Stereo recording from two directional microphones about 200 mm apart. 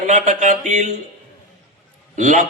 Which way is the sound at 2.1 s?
40° right (ahead or behind).